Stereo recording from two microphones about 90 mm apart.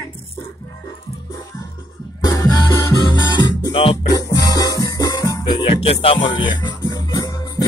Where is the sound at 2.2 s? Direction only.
35° left (ahead or behind).